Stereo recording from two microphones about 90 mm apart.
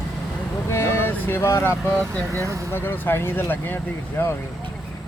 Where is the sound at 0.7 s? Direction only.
30° left (ahead or behind).